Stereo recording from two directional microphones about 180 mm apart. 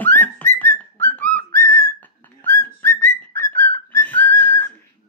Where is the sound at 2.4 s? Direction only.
10° left (ahead or behind).